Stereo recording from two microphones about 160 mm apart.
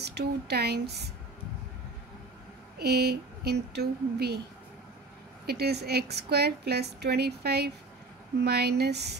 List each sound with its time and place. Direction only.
0.0 s a woman's voice: 90° right
2.8 s a woman's voice: 90° right
5.5 s a woman's voice: 90° right